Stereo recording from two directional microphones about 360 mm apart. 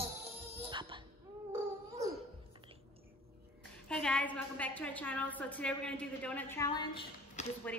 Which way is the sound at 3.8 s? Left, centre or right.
Centre.